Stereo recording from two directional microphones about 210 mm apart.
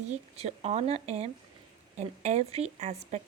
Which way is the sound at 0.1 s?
30° right (ahead or behind).